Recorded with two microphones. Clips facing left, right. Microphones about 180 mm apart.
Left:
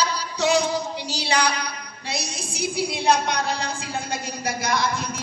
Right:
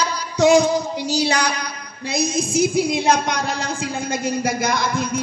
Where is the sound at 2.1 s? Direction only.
45° right (ahead or behind).